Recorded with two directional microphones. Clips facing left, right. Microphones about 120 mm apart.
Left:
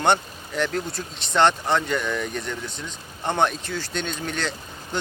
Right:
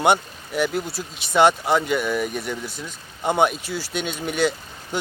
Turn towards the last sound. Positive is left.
turn(degrees=-10)  # may be behind; listen again after turning